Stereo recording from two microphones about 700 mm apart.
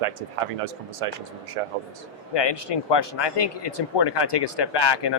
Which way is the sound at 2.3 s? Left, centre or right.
Left.